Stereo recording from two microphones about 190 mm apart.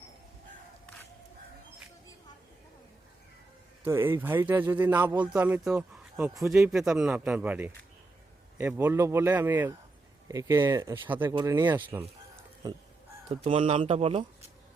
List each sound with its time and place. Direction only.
3.8 s speech: 10° right (ahead or behind)
13.2 s speech: 30° right (ahead or behind)